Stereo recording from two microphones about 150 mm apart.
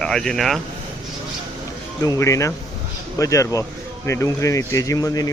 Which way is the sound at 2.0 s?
20° left (ahead or behind).